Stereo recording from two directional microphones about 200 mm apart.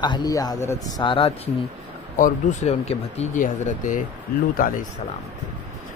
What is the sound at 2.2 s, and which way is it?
Speech, 40° left (ahead or behind).